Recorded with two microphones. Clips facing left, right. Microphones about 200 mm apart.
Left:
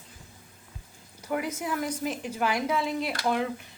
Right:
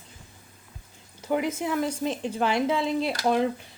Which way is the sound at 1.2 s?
25° right (ahead or behind).